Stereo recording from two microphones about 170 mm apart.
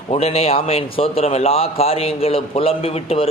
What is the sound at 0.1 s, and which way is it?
A man's voice, 35° left (ahead or behind).